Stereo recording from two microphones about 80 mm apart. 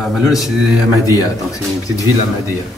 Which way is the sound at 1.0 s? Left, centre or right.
Left.